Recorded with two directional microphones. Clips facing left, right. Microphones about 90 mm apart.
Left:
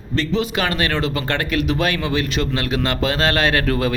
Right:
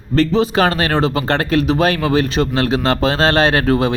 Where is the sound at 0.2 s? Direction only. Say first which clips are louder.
Right 7 dB; 35° right (ahead or behind).